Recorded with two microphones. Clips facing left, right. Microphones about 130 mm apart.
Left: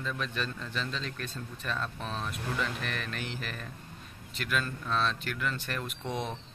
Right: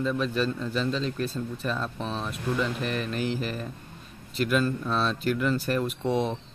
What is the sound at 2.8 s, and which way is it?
Speech, 35° right (ahead or behind).